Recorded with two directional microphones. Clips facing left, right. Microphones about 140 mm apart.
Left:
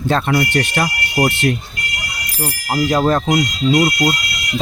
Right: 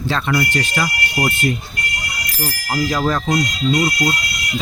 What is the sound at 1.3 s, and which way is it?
Speech, 75° left (ahead or behind).